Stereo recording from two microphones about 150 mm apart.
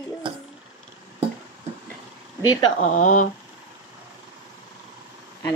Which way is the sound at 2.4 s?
25° left (ahead or behind).